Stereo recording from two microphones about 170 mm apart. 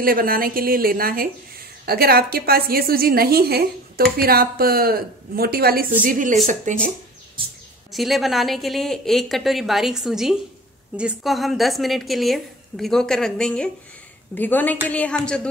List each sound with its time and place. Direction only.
0.0 s a woman's voice: 60° right (ahead or behind); by 6.8 s 45° right (ahead or behind)
7.9 s a woman's voice: centre (ahead or behind)